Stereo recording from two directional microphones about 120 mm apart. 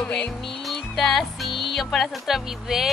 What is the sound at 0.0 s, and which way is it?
Music, 5° left (ahead or behind).